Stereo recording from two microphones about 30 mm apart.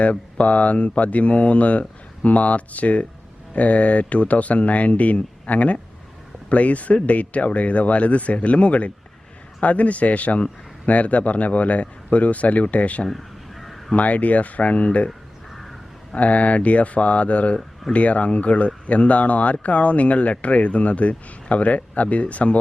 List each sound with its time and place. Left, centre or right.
0.0 s speech: left
13.1 s caw: centre
13.9 s speech: left
16.1 s speech: left